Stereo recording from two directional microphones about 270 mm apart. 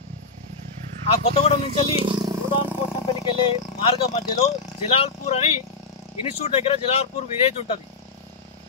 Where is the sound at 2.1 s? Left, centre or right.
Centre.